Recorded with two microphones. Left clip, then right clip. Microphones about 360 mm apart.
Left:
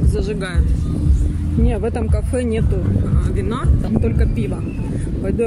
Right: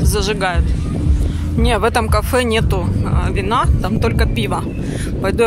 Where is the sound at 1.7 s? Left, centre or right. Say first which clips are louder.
Right 11 dB; right.